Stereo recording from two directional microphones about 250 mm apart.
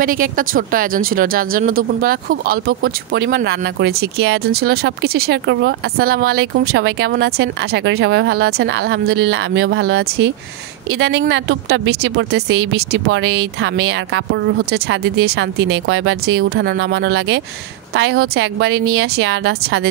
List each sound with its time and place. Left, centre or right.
0.0 s speech: right
12.3 s speech: right